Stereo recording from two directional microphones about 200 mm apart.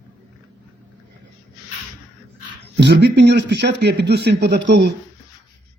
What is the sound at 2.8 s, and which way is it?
A man's voice, 55° right (ahead or behind).